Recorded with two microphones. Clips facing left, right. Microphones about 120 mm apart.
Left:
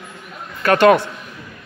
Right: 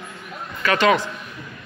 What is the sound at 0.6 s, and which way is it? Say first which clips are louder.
Speech: left 6 dB; 55° left (ahead or behind).